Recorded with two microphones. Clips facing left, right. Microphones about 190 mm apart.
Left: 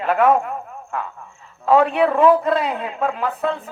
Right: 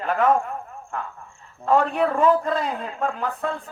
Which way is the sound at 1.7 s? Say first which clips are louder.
Left 5 dB; 70° left (ahead or behind).